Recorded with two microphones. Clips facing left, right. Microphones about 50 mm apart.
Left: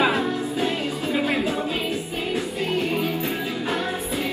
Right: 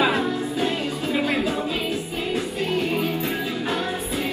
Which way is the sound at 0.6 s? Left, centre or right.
Left.